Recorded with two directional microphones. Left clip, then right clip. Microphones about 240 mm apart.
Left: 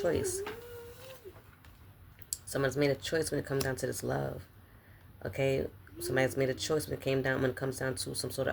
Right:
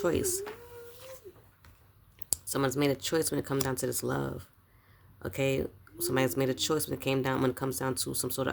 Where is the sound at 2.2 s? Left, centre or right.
Right.